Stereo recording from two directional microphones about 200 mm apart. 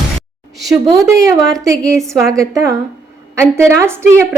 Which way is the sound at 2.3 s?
15° right (ahead or behind).